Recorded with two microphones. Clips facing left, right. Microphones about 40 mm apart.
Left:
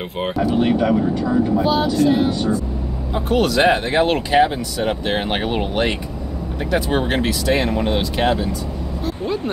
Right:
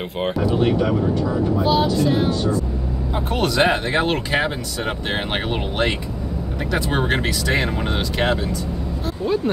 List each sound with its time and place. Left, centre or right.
0.2 s speech: centre
1.6 s speech: centre
3.2 s speech: centre
3.6 s speech: centre